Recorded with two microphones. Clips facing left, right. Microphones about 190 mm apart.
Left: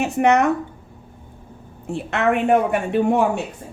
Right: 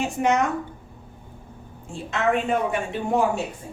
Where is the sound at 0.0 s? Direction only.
65° left (ahead or behind).